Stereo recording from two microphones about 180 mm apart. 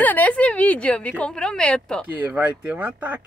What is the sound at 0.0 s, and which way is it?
A woman's voice, 10° left (ahead or behind).